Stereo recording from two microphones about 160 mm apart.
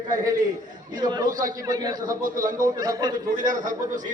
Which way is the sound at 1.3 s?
55° right (ahead or behind).